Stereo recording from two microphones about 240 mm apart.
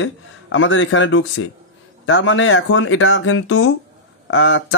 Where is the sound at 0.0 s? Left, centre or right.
Left.